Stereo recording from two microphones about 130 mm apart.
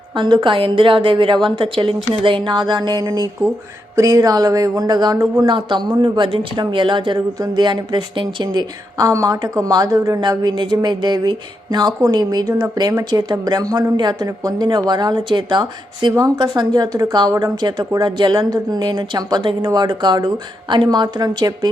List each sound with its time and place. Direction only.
0.2 s speech: 40° right (ahead or behind)
5.1 s speech: 20° right (ahead or behind)
5.5 s speech: 35° right (ahead or behind)